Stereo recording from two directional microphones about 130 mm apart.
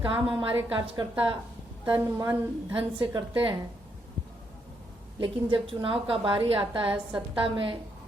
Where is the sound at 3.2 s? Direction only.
40° right (ahead or behind).